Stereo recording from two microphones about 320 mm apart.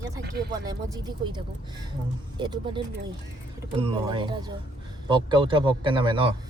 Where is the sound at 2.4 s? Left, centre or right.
Centre.